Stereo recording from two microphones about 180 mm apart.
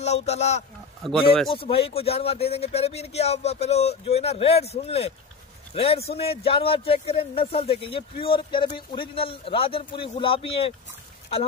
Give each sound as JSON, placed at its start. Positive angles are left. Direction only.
{"t": 0.0, "sound": "speech", "side_deg": 40}